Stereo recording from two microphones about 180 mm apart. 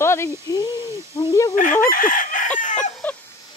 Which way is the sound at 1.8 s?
50° left (ahead or behind).